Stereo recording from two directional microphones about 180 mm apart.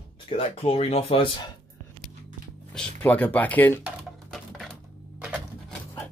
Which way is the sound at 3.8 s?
Centre (ahead or behind).